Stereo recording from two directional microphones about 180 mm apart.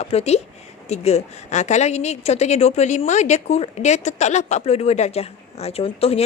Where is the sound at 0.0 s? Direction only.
35° left (ahead or behind).